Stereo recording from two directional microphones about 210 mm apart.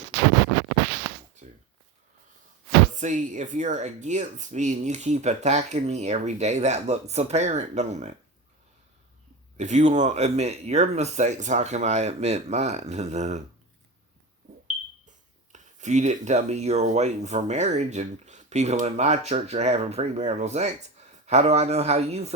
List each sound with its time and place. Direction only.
2.9 s speech: 35° right (ahead or behind)
9.6 s speech: 35° right (ahead or behind)
15.5 s speech: 35° right (ahead or behind)